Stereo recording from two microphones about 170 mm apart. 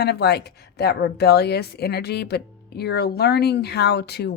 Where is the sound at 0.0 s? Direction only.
75° left (ahead or behind).